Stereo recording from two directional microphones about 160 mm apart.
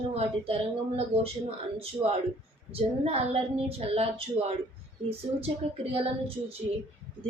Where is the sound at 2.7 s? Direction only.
40° right (ahead or behind).